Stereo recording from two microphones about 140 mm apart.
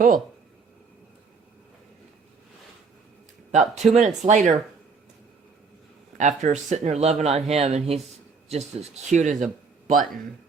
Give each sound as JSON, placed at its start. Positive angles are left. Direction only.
{"t": 3.5, "sound": "speech", "side_deg": -55}
{"t": 6.1, "sound": "speech", "side_deg": -60}